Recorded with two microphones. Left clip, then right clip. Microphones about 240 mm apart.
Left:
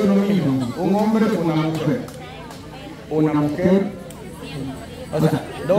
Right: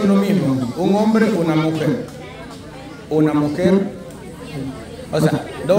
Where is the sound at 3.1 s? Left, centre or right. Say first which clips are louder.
Right 3 dB; centre.